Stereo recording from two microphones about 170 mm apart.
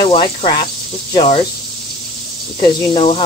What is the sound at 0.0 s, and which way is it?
Speech, 30° left (ahead or behind).